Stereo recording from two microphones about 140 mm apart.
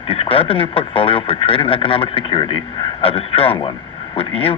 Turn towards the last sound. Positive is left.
turn(degrees=45)  # may be behind; listen again after turning